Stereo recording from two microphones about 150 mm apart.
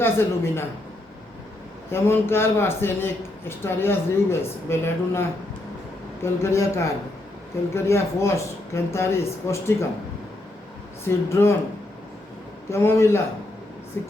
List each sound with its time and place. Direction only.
0.0 s speech: 15° left (ahead or behind)
1.9 s speech: 15° left (ahead or behind)
6.2 s speech: 20° left (ahead or behind)
11.0 s speech: 15° left (ahead or behind)
12.7 s speech: 15° left (ahead or behind)